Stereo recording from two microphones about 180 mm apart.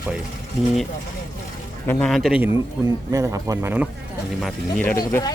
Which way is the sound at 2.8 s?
20° right (ahead or behind).